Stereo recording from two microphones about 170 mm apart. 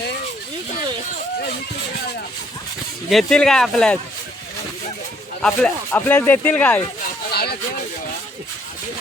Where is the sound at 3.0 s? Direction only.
Centre (ahead or behind).